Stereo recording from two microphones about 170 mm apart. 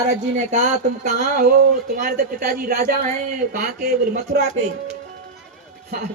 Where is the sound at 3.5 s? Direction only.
50° right (ahead or behind).